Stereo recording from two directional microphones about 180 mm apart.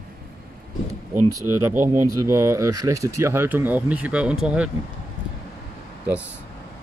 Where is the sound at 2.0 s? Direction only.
15° right (ahead or behind).